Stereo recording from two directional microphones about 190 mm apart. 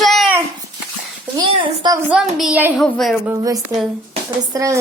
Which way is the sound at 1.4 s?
20° right (ahead or behind).